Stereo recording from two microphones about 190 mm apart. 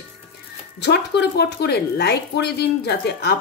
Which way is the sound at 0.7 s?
60° left (ahead or behind).